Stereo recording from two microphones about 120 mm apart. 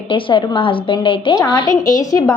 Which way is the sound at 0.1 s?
45° left (ahead or behind).